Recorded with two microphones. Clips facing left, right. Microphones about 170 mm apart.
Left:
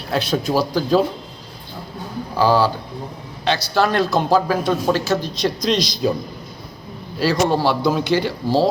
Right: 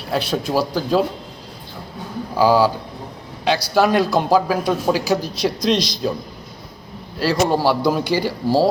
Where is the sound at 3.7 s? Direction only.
10° right (ahead or behind).